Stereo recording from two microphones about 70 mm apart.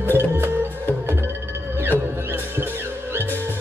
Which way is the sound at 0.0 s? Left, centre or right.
Right.